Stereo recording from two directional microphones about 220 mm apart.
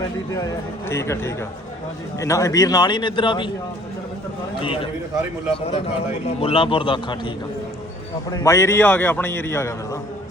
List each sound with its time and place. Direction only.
0.0 s a man's voice: 15° left (ahead or behind)
4.6 s a man's voice: 25° left (ahead or behind)
6.2 s a man's voice: 25° left (ahead or behind)
8.3 s a man's voice: 15° left (ahead or behind)